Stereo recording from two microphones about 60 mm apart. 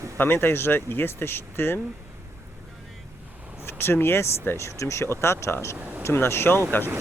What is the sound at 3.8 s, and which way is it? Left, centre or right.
Speech, left.